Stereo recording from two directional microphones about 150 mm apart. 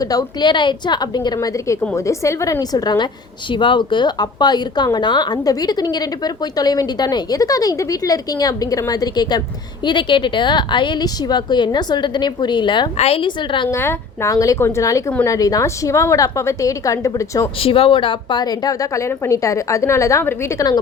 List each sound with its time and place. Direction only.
0.0 s a woman's voice: 25° left (ahead or behind)
13.7 s speech: 15° left (ahead or behind)
17.6 s speech: 35° left (ahead or behind); by 20.7 s 20° left (ahead or behind)